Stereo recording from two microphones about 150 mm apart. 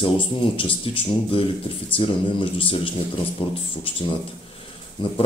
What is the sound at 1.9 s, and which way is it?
Speech, 35° left (ahead or behind).